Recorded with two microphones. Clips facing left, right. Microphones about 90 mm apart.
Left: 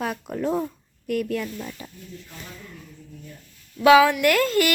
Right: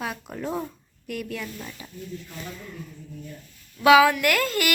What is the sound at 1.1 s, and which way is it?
Speech, 45° left (ahead or behind).